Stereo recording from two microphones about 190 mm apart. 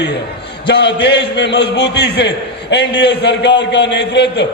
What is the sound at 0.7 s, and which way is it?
A man's voice, 60° left (ahead or behind).